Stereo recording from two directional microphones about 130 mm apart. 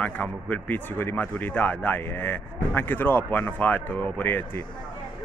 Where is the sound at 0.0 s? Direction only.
10° left (ahead or behind).